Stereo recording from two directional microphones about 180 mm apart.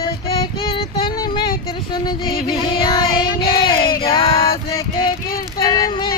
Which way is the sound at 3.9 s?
30° left (ahead or behind).